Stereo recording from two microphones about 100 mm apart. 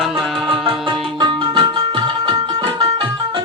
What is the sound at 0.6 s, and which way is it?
Music, 55° right (ahead or behind).